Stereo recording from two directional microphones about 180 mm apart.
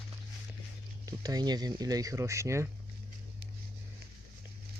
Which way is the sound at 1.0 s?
20° right (ahead or behind).